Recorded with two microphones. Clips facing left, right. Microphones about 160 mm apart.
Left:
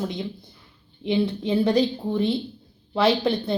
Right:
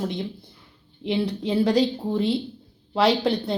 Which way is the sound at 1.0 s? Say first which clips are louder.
Left 2 dB; centre (ahead or behind).